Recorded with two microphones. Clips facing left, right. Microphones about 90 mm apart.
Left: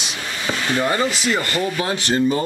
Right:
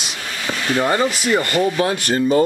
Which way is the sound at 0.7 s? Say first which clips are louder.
Right 3 dB; 10° right (ahead or behind).